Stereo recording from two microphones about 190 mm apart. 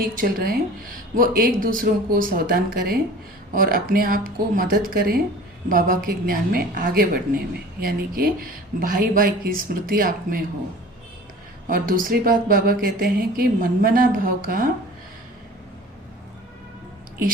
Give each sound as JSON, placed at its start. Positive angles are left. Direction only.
{"t": 0.2, "sound": "a woman's voice", "side_deg": -50}
{"t": 11.7, "sound": "a woman's voice", "side_deg": -45}